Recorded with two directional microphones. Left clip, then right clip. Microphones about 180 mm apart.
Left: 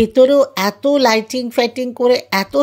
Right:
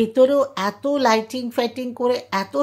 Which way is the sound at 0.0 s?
35° left (ahead or behind).